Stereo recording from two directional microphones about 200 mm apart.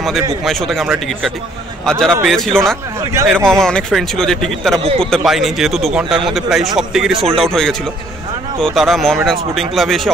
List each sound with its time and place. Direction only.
0.0 s speech: centre (ahead or behind)
4.7 s a man's voice: 30° right (ahead or behind)
5.0 s speech: centre (ahead or behind)